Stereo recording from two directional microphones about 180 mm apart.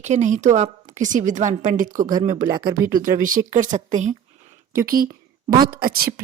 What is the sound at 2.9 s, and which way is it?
A woman's voice, 50° right (ahead or behind).